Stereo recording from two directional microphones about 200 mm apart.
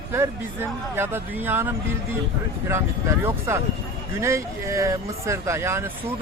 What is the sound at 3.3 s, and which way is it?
Speech, 15° right (ahead or behind).